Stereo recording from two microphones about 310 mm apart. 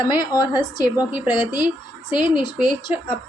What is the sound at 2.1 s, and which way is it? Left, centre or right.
A woman's voice, centre.